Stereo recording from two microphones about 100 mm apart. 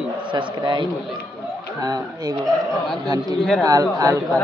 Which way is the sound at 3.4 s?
Centre (ahead or behind).